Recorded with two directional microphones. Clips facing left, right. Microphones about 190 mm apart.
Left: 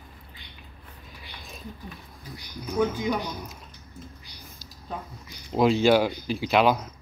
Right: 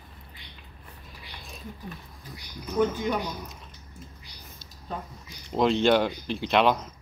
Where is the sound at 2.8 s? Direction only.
15° left (ahead or behind).